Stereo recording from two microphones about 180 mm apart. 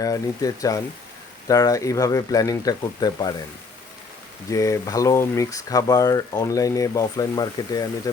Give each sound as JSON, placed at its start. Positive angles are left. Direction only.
{"t": 0.0, "sound": "speech", "side_deg": 20}
{"t": 4.5, "sound": "speech", "side_deg": 15}